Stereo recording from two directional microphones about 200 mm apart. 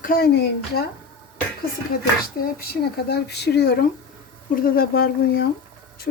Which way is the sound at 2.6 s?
55° left (ahead or behind).